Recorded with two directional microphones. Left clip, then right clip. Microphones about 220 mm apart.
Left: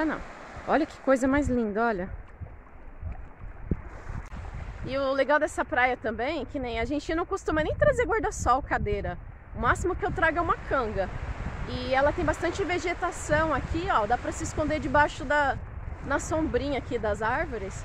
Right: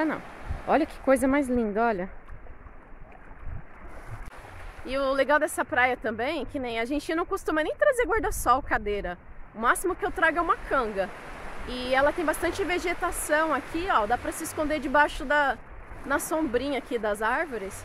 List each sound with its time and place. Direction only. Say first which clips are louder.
0.7 s speech: right 1 dB; centre (ahead or behind)
4.8 s speech: right 1 dB; centre (ahead or behind)
11.1 s a sound: right 1 dB; 50° right (ahead or behind)
11.7 s speech: right 1 dB; centre (ahead or behind)